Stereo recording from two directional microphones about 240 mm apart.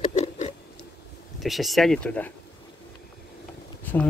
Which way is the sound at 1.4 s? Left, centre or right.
Centre.